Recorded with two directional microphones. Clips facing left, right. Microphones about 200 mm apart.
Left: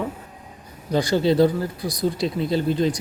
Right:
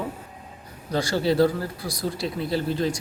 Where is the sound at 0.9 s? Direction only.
15° left (ahead or behind).